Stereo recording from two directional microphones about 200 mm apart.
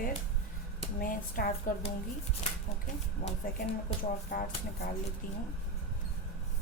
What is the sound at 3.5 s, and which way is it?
Speech, 45° left (ahead or behind).